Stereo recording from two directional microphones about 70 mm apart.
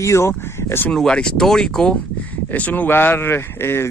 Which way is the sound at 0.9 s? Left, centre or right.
Centre.